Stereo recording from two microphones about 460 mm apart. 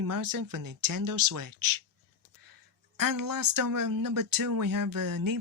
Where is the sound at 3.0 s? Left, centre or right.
Right.